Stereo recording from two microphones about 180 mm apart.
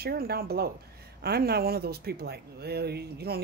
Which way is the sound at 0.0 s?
60° right (ahead or behind).